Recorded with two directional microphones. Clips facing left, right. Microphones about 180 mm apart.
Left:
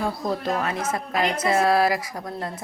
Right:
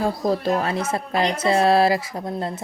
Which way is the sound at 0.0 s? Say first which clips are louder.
Right 4 dB; 30° right (ahead or behind).